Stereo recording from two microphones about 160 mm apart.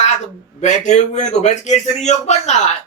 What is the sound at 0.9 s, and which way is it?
Speech, 45° left (ahead or behind).